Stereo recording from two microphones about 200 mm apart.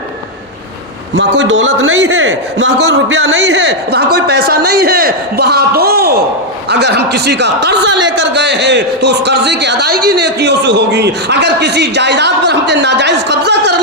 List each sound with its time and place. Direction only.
1.1 s speech: 65° right (ahead or behind)